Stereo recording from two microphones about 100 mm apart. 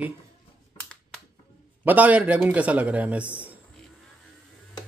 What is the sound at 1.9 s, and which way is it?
Speech, 15° right (ahead or behind).